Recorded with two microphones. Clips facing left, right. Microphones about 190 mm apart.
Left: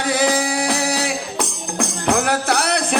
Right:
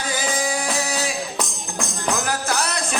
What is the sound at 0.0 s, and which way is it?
Music, 65° left (ahead or behind).